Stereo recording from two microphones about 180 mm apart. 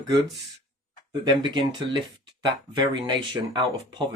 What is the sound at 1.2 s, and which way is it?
Speech, 25° right (ahead or behind).